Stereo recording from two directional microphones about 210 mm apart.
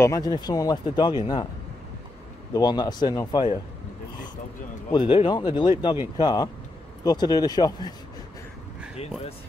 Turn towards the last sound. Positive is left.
turn(degrees=20)  # may be behind; listen again after turning